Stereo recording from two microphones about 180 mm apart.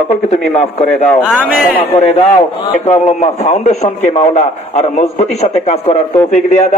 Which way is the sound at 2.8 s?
40° left (ahead or behind).